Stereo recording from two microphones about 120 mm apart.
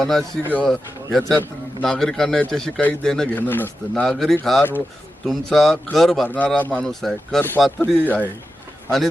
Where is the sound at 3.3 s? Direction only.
15° left (ahead or behind).